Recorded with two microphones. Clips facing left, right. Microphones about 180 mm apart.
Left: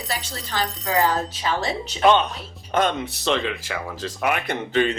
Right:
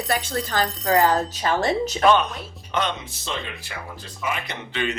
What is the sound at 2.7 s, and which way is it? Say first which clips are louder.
Speech: left 4 dB; 50° left (ahead or behind).